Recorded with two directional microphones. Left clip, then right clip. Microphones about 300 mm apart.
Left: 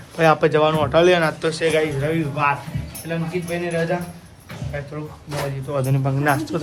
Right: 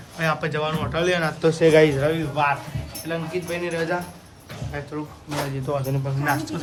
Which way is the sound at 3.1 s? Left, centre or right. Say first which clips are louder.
Left 2 dB; centre.